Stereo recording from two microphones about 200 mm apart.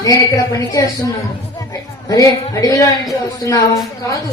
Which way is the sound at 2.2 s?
15° left (ahead or behind).